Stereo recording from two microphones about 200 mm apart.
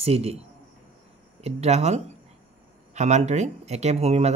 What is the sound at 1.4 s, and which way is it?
Speech, 30° right (ahead or behind).